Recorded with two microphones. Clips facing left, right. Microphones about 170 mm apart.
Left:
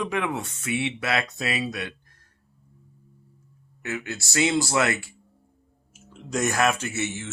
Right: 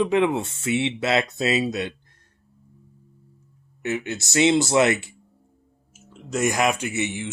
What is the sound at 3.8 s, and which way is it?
Speech, 20° right (ahead or behind).